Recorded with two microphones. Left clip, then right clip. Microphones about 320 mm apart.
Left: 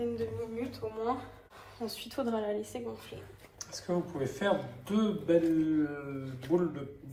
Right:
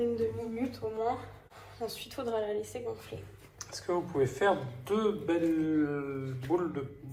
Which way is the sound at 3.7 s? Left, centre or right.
Centre.